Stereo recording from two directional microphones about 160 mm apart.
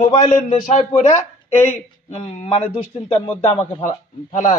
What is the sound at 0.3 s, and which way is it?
Speech, 50° left (ahead or behind).